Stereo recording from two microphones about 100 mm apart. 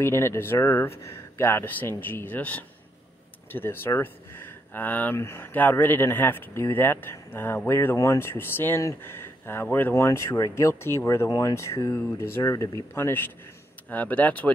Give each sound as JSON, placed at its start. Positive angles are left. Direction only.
{"t": 0.0, "sound": "speech", "side_deg": 25}